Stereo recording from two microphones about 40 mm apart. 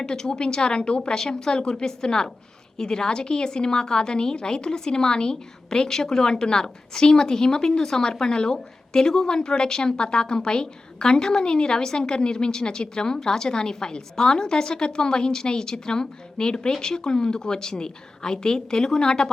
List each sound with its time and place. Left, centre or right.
0.0 s a woman's voice: centre